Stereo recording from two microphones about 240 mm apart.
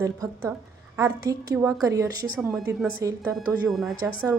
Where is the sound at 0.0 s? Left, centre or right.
Centre.